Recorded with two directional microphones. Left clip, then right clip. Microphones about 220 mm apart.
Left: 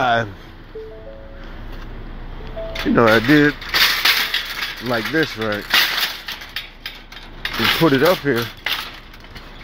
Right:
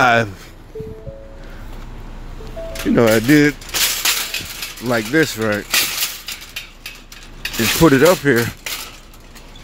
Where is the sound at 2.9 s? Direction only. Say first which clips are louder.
Even; 30° right (ahead or behind).